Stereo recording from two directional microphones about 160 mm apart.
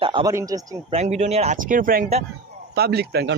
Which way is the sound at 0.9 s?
45° right (ahead or behind).